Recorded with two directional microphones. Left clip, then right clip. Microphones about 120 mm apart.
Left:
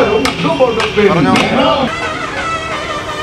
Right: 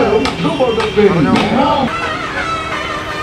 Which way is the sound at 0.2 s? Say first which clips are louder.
Left 3 dB; 35° left (ahead or behind).